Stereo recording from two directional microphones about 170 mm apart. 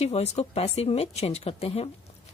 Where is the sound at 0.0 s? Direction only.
35° left (ahead or behind).